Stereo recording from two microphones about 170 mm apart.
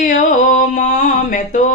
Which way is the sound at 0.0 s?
50° left (ahead or behind).